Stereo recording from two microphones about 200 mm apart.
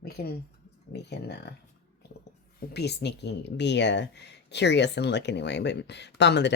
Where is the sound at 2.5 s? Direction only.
55° left (ahead or behind).